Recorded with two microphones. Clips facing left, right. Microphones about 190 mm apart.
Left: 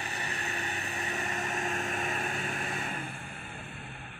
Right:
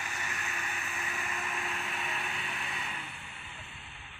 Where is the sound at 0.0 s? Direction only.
35° left (ahead or behind).